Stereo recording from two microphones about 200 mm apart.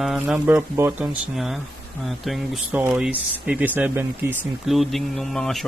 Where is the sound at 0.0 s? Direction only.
Centre (ahead or behind).